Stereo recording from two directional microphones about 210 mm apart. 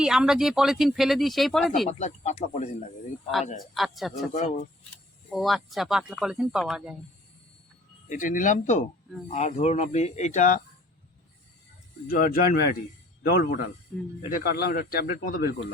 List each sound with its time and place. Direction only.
0.0 s speech: 5° right (ahead or behind)
1.9 s speech: 35° left (ahead or behind)
3.8 s speech: centre (ahead or behind)
4.4 s speech: 35° left (ahead or behind)
5.3 s speech: centre (ahead or behind)
8.1 s speech: 40° left (ahead or behind)
12.0 s speech: 40° left (ahead or behind)
13.9 s speech: centre (ahead or behind)
14.3 s speech: 45° left (ahead or behind)